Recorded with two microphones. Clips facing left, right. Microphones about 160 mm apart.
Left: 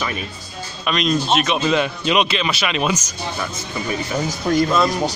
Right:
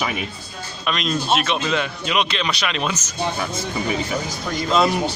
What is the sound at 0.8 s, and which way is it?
Speech, centre (ahead or behind).